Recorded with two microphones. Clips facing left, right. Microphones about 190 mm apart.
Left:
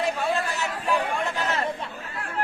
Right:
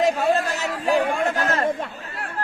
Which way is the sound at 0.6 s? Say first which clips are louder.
Right 5 dB; 40° right (ahead or behind).